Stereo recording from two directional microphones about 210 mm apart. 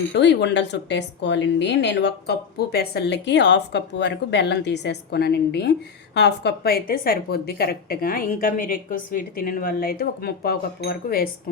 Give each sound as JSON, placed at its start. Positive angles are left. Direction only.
{"t": 0.1, "sound": "a woman's voice", "side_deg": 55}